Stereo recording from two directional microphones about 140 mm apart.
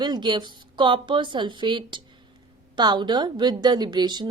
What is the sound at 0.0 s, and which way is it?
A woman's voice, 30° right (ahead or behind).